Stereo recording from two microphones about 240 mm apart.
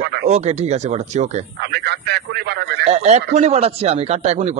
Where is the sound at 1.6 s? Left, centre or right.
Right.